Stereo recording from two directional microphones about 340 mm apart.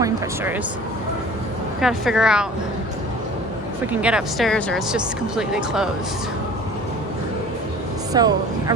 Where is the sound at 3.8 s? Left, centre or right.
Centre.